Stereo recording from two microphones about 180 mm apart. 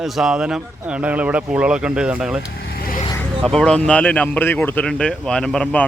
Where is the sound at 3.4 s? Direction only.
5° left (ahead or behind).